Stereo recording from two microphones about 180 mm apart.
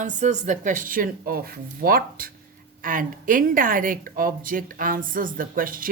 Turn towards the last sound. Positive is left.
turn(degrees=-50)  # may be behind; listen again after turning